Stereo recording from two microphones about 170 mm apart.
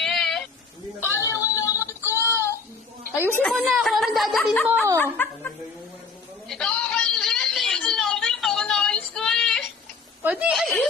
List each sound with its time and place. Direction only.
0.0 s sheep: centre (ahead or behind)
1.0 s a sound: 15° left (ahead or behind)
1.5 s music: 20° left (ahead or behind)
2.0 s child singing: 15° right (ahead or behind)
3.3 s speech: 5° left (ahead or behind)
5.1 s speech: 10° left (ahead or behind)
6.5 s a sound: 5° left (ahead or behind)
10.2 s speech: 5° right (ahead or behind)